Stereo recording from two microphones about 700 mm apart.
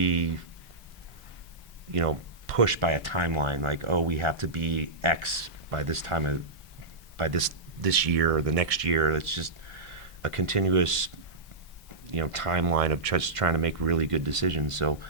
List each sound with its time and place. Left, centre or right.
0.0 s a sound: right
1.9 s speech: right
12.1 s speech: right